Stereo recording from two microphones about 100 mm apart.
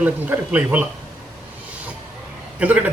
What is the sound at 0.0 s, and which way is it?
Speech, 15° right (ahead or behind).